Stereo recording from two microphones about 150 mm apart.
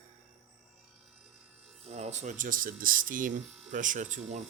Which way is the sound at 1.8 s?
45° right (ahead or behind).